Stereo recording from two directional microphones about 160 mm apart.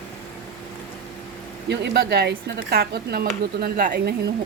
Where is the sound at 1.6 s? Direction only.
90° right.